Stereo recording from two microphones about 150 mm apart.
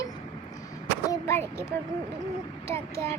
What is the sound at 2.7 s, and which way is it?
Speech, 15° left (ahead or behind).